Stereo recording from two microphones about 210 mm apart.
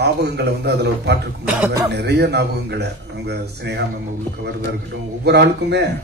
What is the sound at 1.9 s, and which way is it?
A man's voice, 55° right (ahead or behind).